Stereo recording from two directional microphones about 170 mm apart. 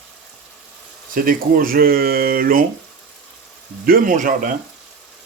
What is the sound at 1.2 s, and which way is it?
Speech, 55° right (ahead or behind).